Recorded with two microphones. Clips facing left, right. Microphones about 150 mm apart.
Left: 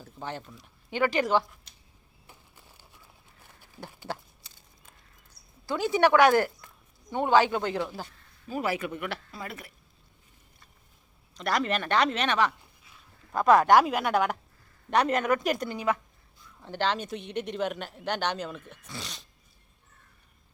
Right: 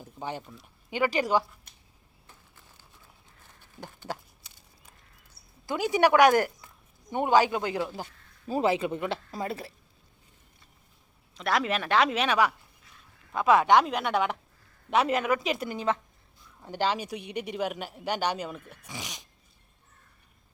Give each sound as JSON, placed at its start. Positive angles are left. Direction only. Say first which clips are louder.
{"t": 0.0, "sound": "speech", "louder": "right 1 dB", "side_deg": -15}
{"t": 1.7, "sound": "a sound", "louder": "right 1 dB", "side_deg": -50}
{"t": 2.2, "sound": "a sound", "louder": "left 2 dB", "side_deg": 15}
{"t": 5.6, "sound": "speech", "louder": "even", "side_deg": -15}
{"t": 8.4, "sound": "speech", "louder": "right 4 dB", "side_deg": -25}
{"t": 11.3, "sound": "speech", "louder": "even", "side_deg": 0}
{"t": 15.7, "sound": "speech", "louder": "even", "side_deg": -25}
{"t": 16.6, "sound": "speech", "louder": "even", "side_deg": -10}